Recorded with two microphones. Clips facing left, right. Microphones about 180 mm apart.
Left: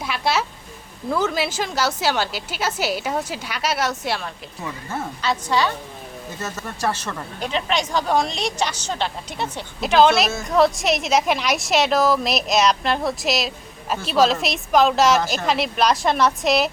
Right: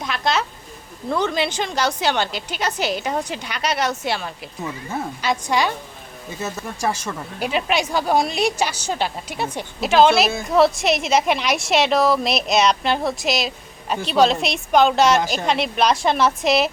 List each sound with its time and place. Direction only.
0.0 s speech: 10° left (ahead or behind)
4.9 s a woman's voice: 10° right (ahead or behind)